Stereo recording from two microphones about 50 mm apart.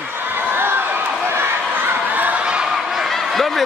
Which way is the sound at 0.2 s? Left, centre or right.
Right.